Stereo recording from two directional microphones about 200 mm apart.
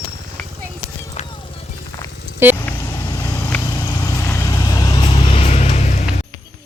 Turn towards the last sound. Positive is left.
turn(degrees=35)  # may be behind; listen again after turning